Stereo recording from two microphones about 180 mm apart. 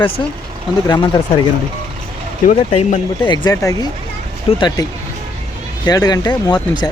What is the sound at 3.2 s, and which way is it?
Speech, 25° left (ahead or behind).